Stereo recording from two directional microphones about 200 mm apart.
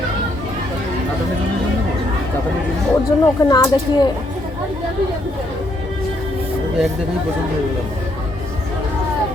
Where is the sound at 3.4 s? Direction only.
15° left (ahead or behind).